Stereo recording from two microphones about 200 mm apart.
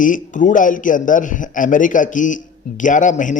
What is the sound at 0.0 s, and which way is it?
A man's voice, 40° left (ahead or behind).